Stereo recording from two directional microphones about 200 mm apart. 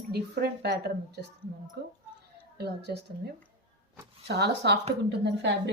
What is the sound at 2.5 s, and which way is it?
Speech, 55° right (ahead or behind).